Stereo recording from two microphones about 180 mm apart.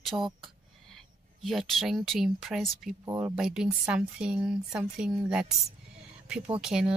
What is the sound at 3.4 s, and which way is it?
Speech, 5° right (ahead or behind).